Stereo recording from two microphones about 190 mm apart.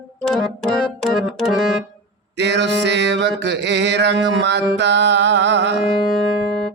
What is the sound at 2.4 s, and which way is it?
Music, 65° right (ahead or behind).